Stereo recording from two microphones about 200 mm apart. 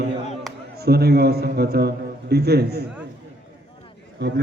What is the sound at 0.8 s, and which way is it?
A man's voice, 50° right (ahead or behind).